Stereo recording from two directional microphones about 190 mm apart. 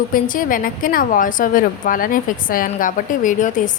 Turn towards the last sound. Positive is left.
turn(degrees=40)  # may be behind; listen again after turning